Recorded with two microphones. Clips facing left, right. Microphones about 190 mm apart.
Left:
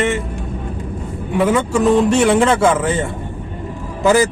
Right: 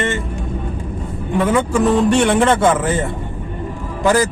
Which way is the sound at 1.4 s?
Centre (ahead or behind).